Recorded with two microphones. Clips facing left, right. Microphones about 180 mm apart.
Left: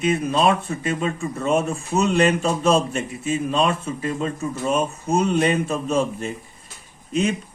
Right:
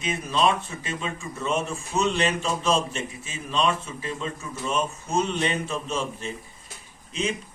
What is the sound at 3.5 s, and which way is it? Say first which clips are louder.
Speech: right 1 dB; 55° left (ahead or behind).